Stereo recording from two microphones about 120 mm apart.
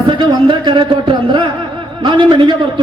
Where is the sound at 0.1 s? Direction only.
40° right (ahead or behind).